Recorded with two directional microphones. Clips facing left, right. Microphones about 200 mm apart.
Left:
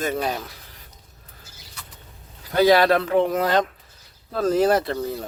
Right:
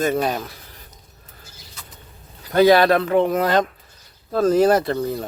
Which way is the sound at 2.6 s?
60° right (ahead or behind).